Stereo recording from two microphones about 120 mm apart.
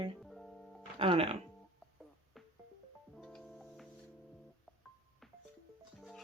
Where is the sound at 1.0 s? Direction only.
55° right (ahead or behind).